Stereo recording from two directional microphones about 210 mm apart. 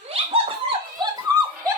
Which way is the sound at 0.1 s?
25° right (ahead or behind).